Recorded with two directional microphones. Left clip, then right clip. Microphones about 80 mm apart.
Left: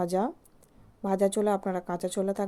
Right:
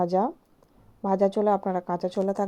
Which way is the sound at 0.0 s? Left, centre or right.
Centre.